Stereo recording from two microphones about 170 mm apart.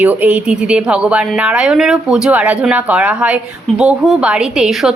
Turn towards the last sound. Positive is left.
turn(degrees=-5)  # may be behind; listen again after turning